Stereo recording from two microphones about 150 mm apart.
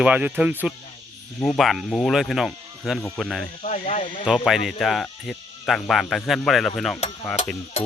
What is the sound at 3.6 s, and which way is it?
Cricket, 55° left (ahead or behind).